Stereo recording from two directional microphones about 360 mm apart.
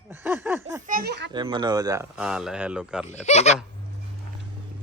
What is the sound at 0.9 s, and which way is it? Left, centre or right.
Children playing, right.